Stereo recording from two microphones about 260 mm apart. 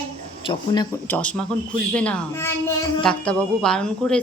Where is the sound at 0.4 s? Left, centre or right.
Centre.